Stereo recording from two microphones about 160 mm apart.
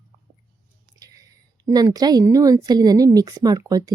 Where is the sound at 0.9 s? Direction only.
25° right (ahead or behind).